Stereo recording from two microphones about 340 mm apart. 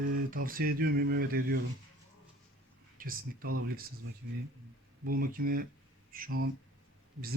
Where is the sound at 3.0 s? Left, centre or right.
Right.